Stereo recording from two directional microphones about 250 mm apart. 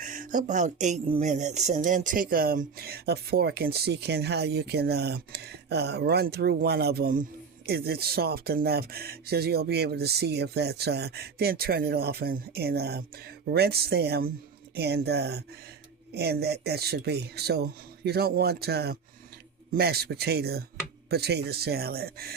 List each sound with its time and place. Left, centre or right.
0.0 s speech: right